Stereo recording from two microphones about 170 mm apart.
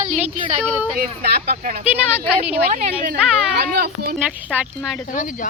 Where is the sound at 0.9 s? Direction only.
60° right (ahead or behind).